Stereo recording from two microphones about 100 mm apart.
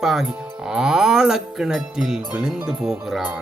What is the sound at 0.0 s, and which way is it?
Speech, 5° right (ahead or behind).